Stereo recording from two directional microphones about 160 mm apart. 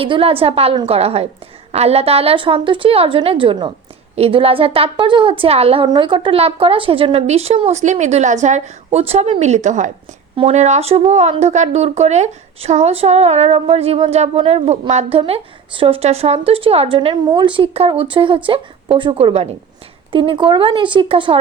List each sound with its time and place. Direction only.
0.0 s a woman's voice: 35° right (ahead or behind)
15.2 s a woman's voice: 35° right (ahead or behind)